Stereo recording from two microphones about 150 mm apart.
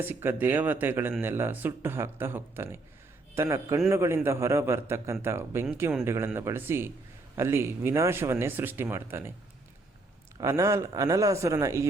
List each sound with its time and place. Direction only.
0.0 s a man's voice: 15° right (ahead or behind)
10.4 s a man's voice: 20° right (ahead or behind)